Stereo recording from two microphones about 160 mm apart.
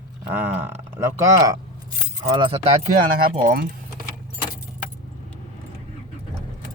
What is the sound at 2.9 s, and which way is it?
Speech, 60° right (ahead or behind).